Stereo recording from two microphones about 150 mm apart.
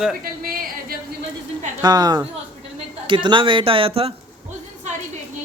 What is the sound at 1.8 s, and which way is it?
A man's voice, 25° right (ahead or behind).